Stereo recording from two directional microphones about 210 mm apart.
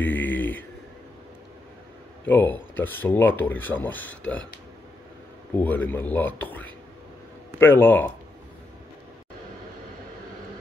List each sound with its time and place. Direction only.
0.0 s mantra: 10° left (ahead or behind)
2.2 s speech: 10° left (ahead or behind)
5.6 s speech: 10° left (ahead or behind)